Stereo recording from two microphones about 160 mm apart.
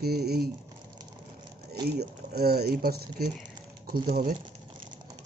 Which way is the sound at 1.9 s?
80° right.